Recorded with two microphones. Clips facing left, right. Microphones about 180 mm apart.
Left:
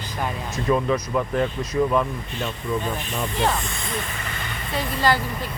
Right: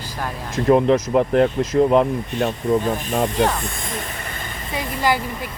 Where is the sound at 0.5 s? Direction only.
60° right (ahead or behind).